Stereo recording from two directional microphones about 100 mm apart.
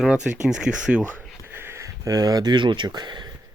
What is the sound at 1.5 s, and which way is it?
Speech, 25° right (ahead or behind).